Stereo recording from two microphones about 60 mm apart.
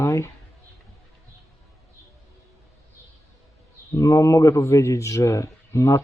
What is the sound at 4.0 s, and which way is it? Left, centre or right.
Speech, left.